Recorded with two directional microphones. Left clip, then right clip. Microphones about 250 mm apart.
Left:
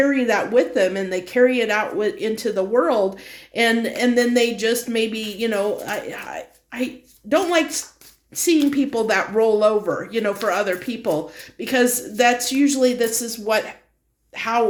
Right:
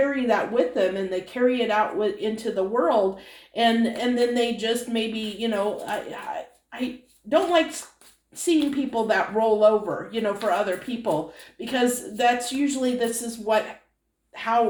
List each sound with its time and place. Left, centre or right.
0.1 s speech: left